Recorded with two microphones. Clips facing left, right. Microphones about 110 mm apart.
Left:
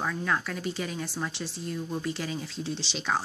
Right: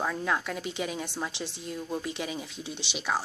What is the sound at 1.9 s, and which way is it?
Speech, 20° right (ahead or behind).